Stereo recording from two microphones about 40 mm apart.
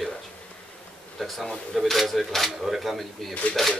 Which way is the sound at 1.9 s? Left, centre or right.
Centre.